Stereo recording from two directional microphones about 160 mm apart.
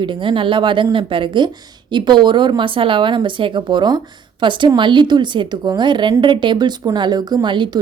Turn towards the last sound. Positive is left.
turn(degrees=-30)  # may be behind; listen again after turning